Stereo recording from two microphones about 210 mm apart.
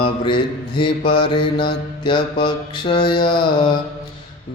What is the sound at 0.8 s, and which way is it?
Mantra, 25° left (ahead or behind).